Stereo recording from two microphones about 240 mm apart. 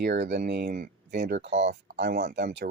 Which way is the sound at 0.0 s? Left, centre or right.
Right.